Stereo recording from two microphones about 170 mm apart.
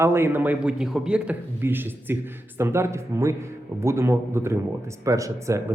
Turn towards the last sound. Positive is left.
turn(degrees=-20)  # may be behind; listen again after turning